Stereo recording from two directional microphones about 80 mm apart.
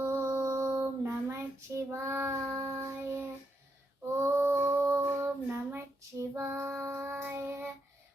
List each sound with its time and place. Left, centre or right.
0.1 s child singing: right
2.6 s child singing: right